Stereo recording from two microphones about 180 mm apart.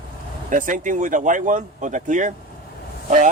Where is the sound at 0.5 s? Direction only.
45° right (ahead or behind).